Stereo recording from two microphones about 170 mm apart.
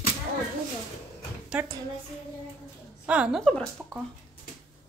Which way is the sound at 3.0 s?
5° right (ahead or behind).